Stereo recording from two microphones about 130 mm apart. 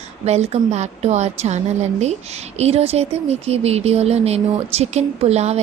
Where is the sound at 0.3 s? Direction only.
60° right (ahead or behind).